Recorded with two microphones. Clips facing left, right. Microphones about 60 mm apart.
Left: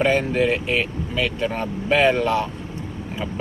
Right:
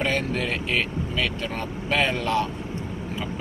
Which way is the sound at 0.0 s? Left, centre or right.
Left.